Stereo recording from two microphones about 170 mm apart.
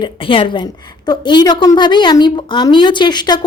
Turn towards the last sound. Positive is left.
turn(degrees=25)  # may be behind; listen again after turning